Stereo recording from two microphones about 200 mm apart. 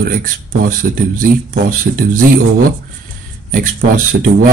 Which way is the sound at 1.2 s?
45° right (ahead or behind).